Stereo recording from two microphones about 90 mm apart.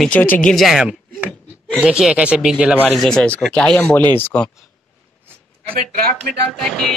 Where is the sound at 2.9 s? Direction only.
5° left (ahead or behind).